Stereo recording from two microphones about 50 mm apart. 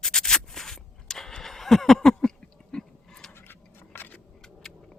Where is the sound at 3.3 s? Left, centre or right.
Left.